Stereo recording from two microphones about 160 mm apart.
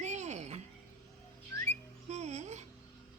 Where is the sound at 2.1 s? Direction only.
45° right (ahead or behind).